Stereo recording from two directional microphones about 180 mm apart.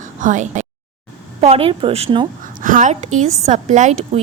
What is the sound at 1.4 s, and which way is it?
Speech, 30° right (ahead or behind).